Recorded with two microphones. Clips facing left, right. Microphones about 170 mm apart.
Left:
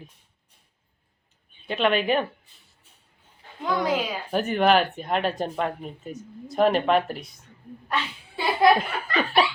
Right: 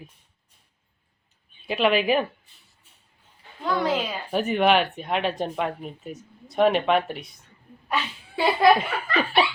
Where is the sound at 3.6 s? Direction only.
15° left (ahead or behind).